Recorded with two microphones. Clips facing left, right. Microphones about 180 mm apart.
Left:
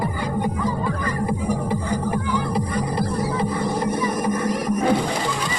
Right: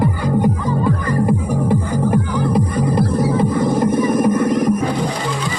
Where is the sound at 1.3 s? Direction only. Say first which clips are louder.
Right 5 dB; 50° right (ahead or behind).